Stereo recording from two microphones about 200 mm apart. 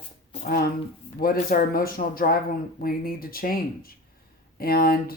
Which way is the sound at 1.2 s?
45° left (ahead or behind).